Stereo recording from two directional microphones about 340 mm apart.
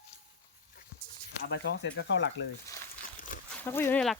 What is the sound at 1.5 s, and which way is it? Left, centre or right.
Speech, left.